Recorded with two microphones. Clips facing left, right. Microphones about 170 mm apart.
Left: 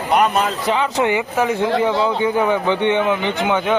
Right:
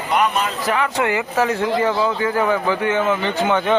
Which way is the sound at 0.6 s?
25° left (ahead or behind).